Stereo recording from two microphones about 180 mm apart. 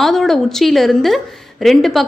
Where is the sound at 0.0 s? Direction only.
Centre (ahead or behind).